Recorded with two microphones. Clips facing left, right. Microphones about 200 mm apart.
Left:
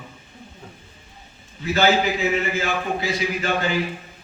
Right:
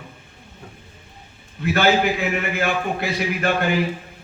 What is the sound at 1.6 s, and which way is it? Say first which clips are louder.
A man's voice: right 1 dB; 60° right (ahead or behind).